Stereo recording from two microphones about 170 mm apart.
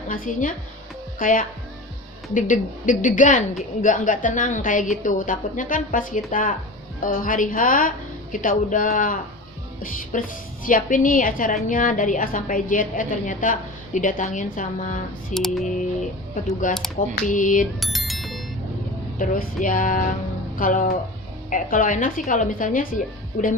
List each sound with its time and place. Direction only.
0.1 s a woman's voice: 50° left (ahead or behind)
15.3 s music: centre (ahead or behind)
16.6 s a woman's voice: 50° left (ahead or behind)
17.7 s music: centre (ahead or behind)
19.2 s a woman's voice: 55° left (ahead or behind)